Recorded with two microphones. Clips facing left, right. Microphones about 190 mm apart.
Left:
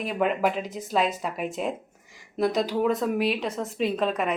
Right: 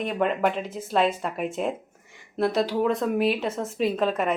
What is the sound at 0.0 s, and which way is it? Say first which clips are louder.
A woman's voice: right 1 dB; centre (ahead or behind).